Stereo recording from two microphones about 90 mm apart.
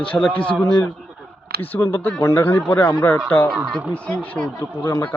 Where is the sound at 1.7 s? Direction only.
20° left (ahead or behind).